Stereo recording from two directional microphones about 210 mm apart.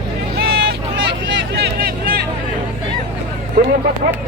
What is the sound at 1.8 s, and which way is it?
Vehicle, 45° right (ahead or behind).